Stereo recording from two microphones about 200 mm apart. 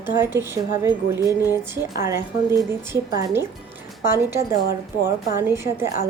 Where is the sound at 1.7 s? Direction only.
15° right (ahead or behind).